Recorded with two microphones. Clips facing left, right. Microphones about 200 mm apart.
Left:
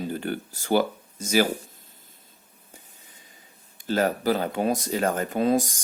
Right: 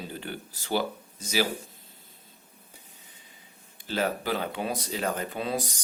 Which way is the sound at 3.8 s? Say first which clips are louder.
Left 6 dB; 45° left (ahead or behind).